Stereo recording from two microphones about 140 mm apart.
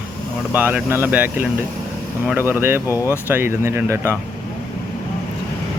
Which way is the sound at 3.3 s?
15° right (ahead or behind).